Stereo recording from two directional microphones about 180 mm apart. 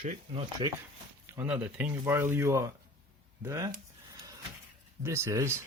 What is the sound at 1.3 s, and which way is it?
Speech, 10° right (ahead or behind).